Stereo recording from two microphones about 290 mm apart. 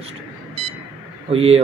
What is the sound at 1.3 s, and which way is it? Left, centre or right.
Speech, centre.